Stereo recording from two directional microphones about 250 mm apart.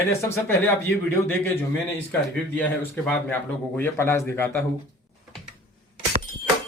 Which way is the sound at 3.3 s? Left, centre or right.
Centre.